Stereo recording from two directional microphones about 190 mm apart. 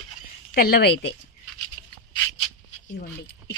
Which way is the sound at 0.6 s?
55° left (ahead or behind).